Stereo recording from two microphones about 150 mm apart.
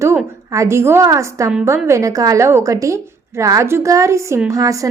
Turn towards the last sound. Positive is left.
turn(degrees=-20)  # may be behind; listen again after turning